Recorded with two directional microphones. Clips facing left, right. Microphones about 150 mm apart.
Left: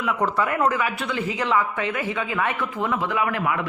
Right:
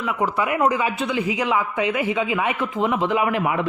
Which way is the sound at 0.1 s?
10° right (ahead or behind).